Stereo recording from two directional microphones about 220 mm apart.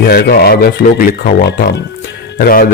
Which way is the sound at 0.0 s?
45° left (ahead or behind).